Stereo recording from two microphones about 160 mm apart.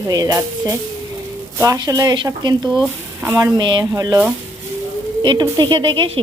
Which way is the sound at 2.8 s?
15° right (ahead or behind).